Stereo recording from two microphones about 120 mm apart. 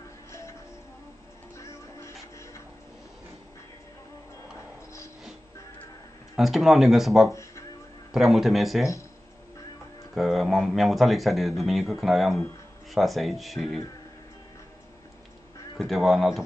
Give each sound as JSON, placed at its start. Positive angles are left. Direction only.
{"t": 0.3, "sound": "music", "side_deg": 25}
{"t": 1.6, "sound": "music", "side_deg": 25}
{"t": 6.3, "sound": "speech", "side_deg": 0}
{"t": 10.1, "sound": "speech", "side_deg": 0}
{"t": 15.8, "sound": "speech", "side_deg": 0}